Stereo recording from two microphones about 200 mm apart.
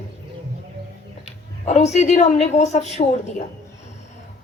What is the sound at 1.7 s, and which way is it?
A woman's voice, 35° left (ahead or behind).